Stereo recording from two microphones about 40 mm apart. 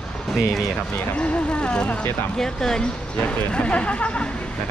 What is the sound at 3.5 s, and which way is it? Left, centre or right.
Speech, left.